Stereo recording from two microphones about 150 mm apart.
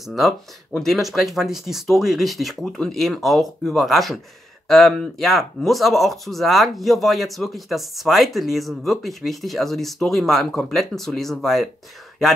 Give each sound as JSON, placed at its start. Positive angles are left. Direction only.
{"t": 0.7, "sound": "speech", "side_deg": 0}